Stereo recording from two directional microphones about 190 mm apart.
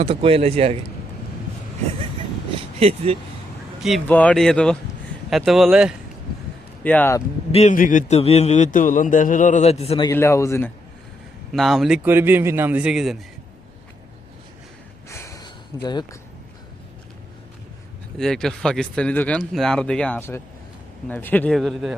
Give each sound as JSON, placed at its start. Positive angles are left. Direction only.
{"t": 0.0, "sound": "speech", "side_deg": -30}
{"t": 2.6, "sound": "speech", "side_deg": -30}
{"t": 3.8, "sound": "a man's voice", "side_deg": 5}
{"t": 6.8, "sound": "speech", "side_deg": 10}
{"t": 7.5, "sound": "a man's voice", "side_deg": 40}
{"t": 10.1, "sound": "speech", "side_deg": 15}
{"t": 11.5, "sound": "a man's voice", "side_deg": 0}
{"t": 15.1, "sound": "a sound", "side_deg": 15}
{"t": 18.2, "sound": "a man's voice", "side_deg": 5}